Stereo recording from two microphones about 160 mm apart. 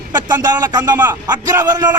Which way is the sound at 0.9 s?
15° right (ahead or behind).